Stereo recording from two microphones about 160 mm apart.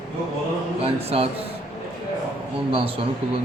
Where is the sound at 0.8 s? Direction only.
40° right (ahead or behind).